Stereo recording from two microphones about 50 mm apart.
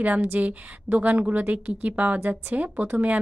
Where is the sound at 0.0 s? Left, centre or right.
Right.